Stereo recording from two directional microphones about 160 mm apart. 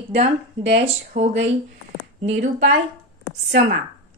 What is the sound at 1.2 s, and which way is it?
A woman's voice, 40° right (ahead or behind).